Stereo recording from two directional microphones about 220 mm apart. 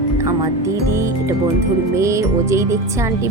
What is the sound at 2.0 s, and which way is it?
Speech, 15° right (ahead or behind).